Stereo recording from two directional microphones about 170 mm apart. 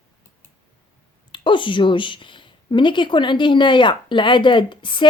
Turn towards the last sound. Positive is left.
turn(degrees=30)  # may be behind; listen again after turning